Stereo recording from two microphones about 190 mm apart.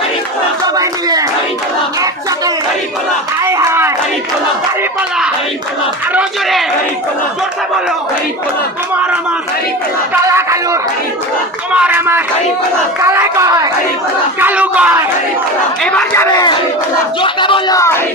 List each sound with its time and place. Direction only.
0.8 s clapping: 20° right (ahead or behind)
3.4 s a sound: 15° right (ahead or behind)
10.2 s battle cry: 15° right (ahead or behind)
15.8 s speech: 5° left (ahead or behind)
16.3 s speech: 20° left (ahead or behind)